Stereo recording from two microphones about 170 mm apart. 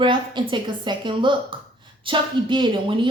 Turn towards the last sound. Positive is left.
turn(degrees=-30)  # may be behind; listen again after turning